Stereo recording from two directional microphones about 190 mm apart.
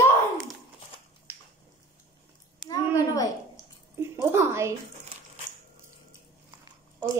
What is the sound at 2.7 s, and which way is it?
Speech, 20° left (ahead or behind).